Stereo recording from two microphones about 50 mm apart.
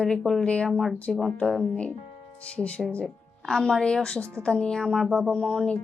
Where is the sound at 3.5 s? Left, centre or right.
Centre.